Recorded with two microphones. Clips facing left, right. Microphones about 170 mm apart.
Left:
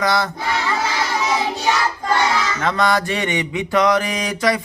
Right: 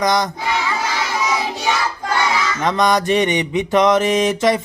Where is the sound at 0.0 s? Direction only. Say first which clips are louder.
Right 2 dB; 15° right (ahead or behind).